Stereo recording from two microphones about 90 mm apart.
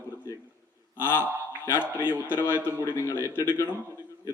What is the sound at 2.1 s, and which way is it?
A man's voice, 20° left (ahead or behind).